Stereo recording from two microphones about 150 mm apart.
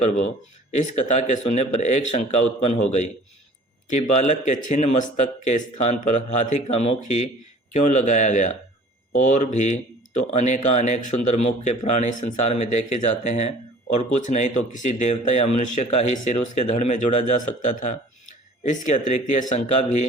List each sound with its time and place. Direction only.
0.7 s speech: 55° left (ahead or behind)